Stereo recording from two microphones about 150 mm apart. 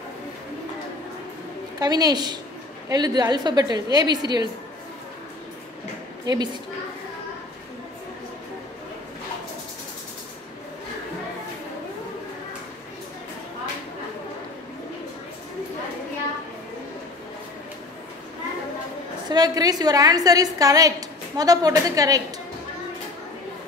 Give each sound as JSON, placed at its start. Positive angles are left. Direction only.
{"t": 1.8, "sound": "a woman's voice", "side_deg": -25}
{"t": 6.2, "sound": "a woman's voice", "side_deg": -30}
{"t": 19.2, "sound": "a woman's voice", "side_deg": -25}